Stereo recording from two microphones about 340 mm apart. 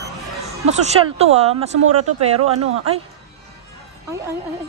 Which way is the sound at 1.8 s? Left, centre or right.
Right.